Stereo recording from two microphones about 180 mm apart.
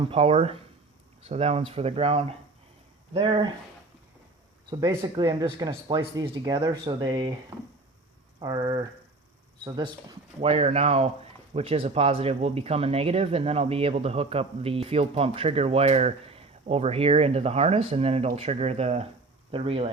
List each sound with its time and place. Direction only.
0.0 s speech: 30° right (ahead or behind)
4.7 s speech: 20° right (ahead or behind)
8.4 s speech: 20° right (ahead or behind)